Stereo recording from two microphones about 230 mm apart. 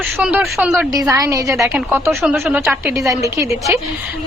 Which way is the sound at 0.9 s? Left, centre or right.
Centre.